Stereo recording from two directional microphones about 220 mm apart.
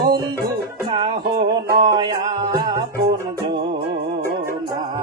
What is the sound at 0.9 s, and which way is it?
Music, 20° right (ahead or behind).